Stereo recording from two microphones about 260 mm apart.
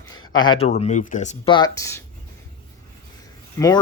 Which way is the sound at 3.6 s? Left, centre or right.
Centre.